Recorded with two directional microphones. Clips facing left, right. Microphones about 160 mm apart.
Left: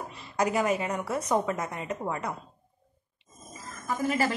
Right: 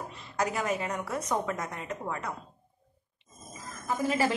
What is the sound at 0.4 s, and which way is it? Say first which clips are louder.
Speech: left 4 dB; 15° left (ahead or behind).